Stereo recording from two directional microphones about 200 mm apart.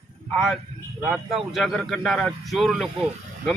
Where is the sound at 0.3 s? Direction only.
Centre (ahead or behind).